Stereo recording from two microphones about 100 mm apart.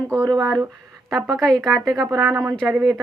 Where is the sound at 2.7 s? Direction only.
5° right (ahead or behind).